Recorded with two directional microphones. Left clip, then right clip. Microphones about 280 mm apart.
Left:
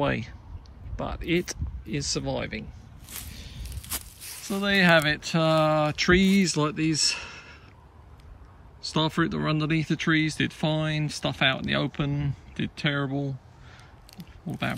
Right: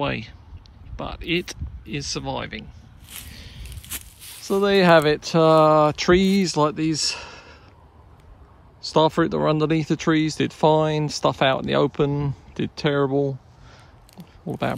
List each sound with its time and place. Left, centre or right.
0.0 s speech: centre
3.1 s a sound: centre
4.2 s zipper: centre
4.6 s speech: centre
8.9 s speech: centre